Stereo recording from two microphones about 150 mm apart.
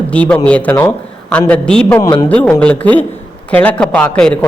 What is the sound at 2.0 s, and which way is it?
Speech, 25° left (ahead or behind).